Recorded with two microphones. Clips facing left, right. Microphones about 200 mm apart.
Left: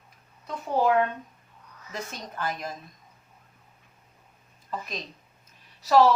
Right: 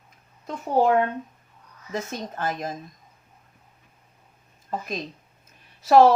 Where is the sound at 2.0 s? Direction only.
45° right (ahead or behind).